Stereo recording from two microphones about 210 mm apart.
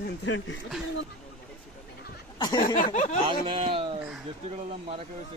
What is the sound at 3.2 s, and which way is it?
Speech, 25° right (ahead or behind).